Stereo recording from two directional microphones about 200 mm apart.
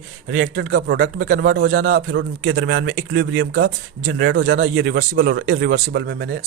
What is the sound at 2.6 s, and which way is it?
Speech, 65° right (ahead or behind).